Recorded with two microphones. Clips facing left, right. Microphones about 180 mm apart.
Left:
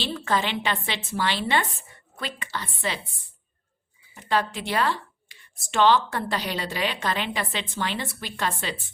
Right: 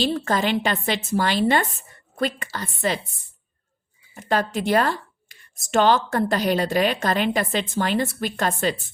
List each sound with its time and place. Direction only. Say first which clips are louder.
0.0 s speech: right 4 dB; 45° right (ahead or behind)
4.1 s speech: right 3 dB; 45° right (ahead or behind)